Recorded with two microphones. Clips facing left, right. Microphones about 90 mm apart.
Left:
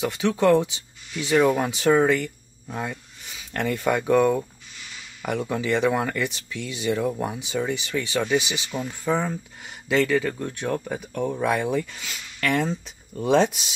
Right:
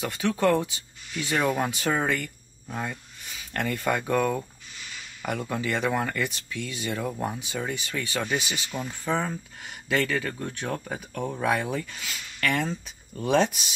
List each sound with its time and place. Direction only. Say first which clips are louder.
0.0 s speech: left 3 dB; 20° left (ahead or behind)
1.6 s speech: left 6 dB; 5° left (ahead or behind)
2.0 s speech: left 7 dB; 15° left (ahead or behind); by 11.6 s centre (ahead or behind)
11.6 s speech: left 5 dB; 10° left (ahead or behind)